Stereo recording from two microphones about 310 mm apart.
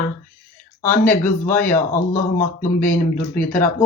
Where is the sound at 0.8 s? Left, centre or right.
Centre.